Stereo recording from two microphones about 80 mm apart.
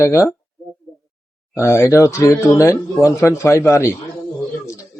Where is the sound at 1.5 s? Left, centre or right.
Left.